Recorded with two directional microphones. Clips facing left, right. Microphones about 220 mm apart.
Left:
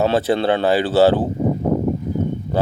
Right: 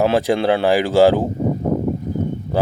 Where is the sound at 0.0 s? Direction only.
10° right (ahead or behind).